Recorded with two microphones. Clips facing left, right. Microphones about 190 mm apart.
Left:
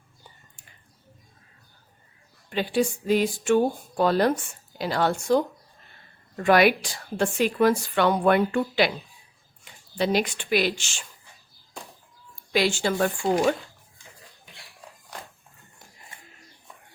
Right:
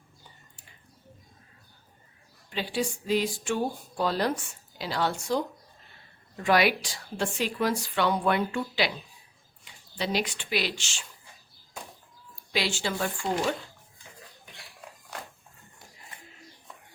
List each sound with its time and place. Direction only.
2.5 s a woman's voice: 50° left (ahead or behind)
12.5 s a woman's voice: 50° left (ahead or behind)